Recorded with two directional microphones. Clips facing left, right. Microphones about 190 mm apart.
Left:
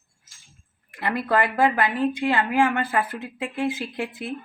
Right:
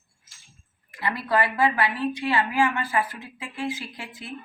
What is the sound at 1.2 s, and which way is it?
A woman's voice, 50° left (ahead or behind).